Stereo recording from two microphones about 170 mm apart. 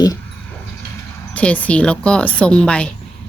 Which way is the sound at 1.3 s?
10° left (ahead or behind).